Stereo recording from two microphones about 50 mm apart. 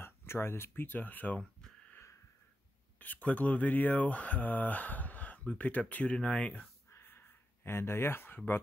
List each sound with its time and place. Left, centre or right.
0.0 s speech: left
3.0 s speech: left
7.1 s a sound: left